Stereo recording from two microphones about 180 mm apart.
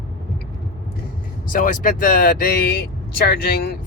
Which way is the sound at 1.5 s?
50° left (ahead or behind).